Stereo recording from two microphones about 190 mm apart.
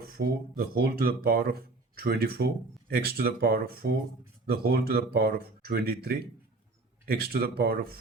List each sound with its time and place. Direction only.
0.0 s speech: 55° right (ahead or behind)